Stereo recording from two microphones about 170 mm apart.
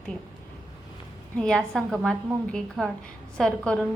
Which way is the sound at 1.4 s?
5° left (ahead or behind).